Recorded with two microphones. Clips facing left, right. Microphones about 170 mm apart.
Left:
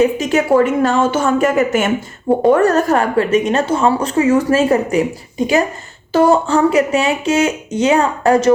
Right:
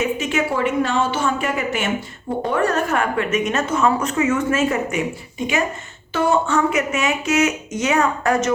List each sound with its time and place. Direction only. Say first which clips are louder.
0.0 s a woman's voice: left 7 dB; 40° left (ahead or behind)